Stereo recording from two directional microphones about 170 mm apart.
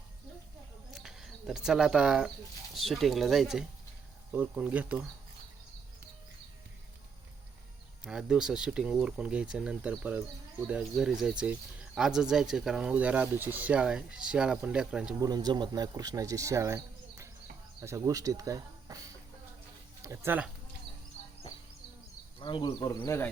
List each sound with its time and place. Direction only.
0.9 s bird: centre (ahead or behind)
2.7 s speech: centre (ahead or behind)
8.0 s speech: 5° right (ahead or behind)
15.2 s speech: 20° right (ahead or behind)
21.2 s insect: 40° left (ahead or behind)
22.4 s speech: 30° left (ahead or behind)